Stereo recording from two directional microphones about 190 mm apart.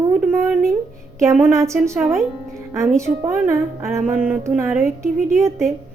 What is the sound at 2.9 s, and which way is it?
A woman's voice, 15° right (ahead or behind).